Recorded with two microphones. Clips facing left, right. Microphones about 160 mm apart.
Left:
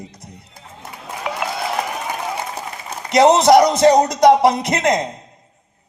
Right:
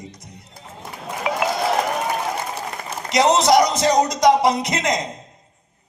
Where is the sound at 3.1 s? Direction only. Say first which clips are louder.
Left 4 dB; 55° left (ahead or behind).